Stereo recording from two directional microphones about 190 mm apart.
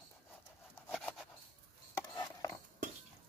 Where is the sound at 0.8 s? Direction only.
Centre (ahead or behind).